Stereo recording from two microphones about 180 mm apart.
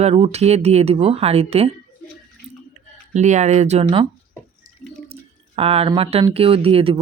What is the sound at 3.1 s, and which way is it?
Speech, 40° right (ahead or behind).